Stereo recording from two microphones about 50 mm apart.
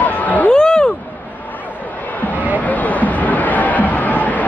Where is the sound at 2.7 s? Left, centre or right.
Left.